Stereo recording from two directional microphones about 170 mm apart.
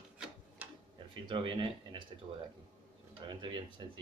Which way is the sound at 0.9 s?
30° right (ahead or behind).